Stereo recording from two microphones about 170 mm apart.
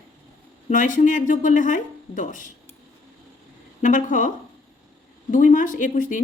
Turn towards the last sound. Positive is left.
turn(degrees=50)  # may be behind; listen again after turning